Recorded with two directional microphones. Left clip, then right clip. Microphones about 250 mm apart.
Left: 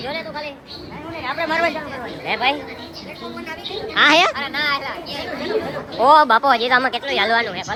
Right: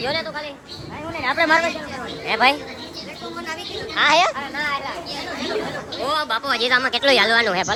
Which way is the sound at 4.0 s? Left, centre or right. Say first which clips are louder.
Left 3 dB; centre.